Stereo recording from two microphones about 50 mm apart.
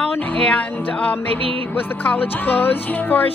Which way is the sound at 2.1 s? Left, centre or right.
Left.